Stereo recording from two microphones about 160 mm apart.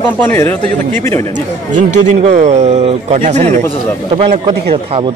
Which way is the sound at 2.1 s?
45° right (ahead or behind).